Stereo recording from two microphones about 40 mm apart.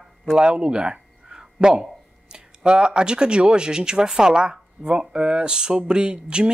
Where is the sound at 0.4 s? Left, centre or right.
Right.